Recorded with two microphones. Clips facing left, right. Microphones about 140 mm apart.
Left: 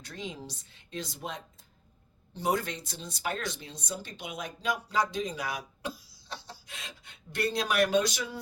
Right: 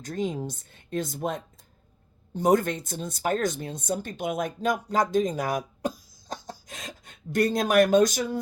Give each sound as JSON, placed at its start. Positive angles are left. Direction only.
{"t": 0.0, "sound": "speech", "side_deg": -45}